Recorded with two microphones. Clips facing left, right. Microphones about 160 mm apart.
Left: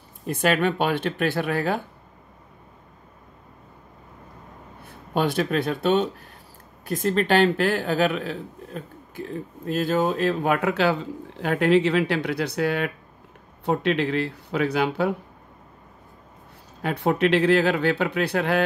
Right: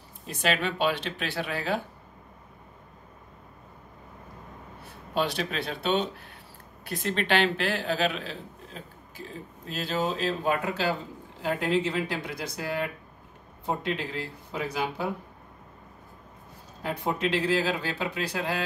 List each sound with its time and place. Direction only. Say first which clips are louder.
0.3 s speech: left 6 dB; 55° left (ahead or behind)
5.1 s a man's voice: left 6 dB; 50° left (ahead or behind); by 15.1 s 70° left (ahead or behind)
16.8 s a man's voice: left 7 dB; 65° left (ahead or behind)